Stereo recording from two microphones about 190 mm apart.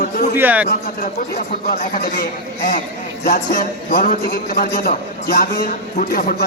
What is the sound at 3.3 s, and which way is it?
A man's voice, 50° left (ahead or behind).